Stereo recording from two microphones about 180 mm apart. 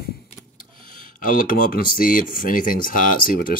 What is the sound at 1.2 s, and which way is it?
Speech, 50° left (ahead or behind).